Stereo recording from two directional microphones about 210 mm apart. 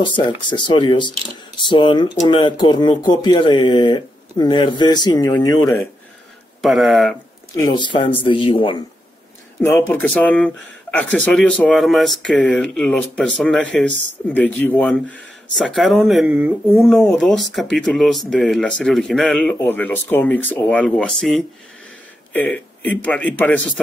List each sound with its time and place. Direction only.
0.7 s speech: 20° left (ahead or behind)
6.6 s speech: centre (ahead or behind)
7.5 s speech: 20° left (ahead or behind)
9.6 s a man's voice: 10° left (ahead or behind)